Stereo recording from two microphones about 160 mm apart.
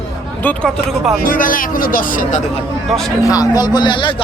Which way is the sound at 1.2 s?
60° left (ahead or behind).